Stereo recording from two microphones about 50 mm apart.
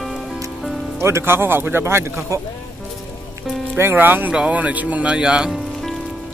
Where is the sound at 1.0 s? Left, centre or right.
Right.